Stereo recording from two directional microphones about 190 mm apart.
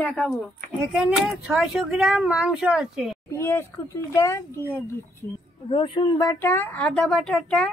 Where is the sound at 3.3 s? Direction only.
10° left (ahead or behind).